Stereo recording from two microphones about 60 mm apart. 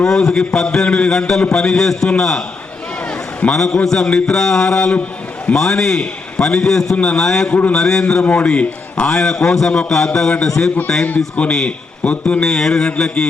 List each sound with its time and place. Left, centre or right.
0.0 s a man's voice: centre
3.1 s a sound: centre
3.8 s a man's voice: centre
6.9 s a man's voice: left
7.2 s a man's voice: centre
8.2 s a man's voice: left
9.0 s a man's voice: centre
11.5 s a man's voice: centre
12.5 s a man's voice: centre